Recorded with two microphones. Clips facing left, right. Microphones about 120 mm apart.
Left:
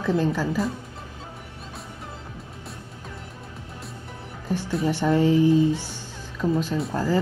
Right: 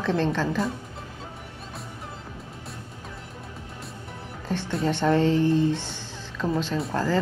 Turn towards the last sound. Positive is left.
turn(degrees=0)  # may be behind; listen again after turning